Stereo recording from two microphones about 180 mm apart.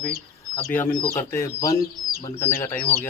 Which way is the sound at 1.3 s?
20° left (ahead or behind).